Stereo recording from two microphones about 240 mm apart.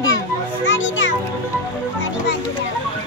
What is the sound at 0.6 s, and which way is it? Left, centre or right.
Music, left.